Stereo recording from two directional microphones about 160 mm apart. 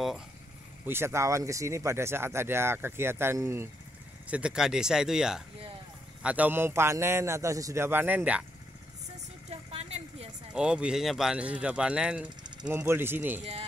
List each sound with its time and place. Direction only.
0.8 s speech: 15° right (ahead or behind)
4.3 s speech: 5° right (ahead or behind)
9.5 s a sound: 40° right (ahead or behind)
10.5 s speech: 5° right (ahead or behind)
13.4 s speech: 40° right (ahead or behind)